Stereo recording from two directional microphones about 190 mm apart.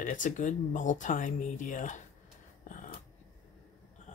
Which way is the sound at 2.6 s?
40° left (ahead or behind).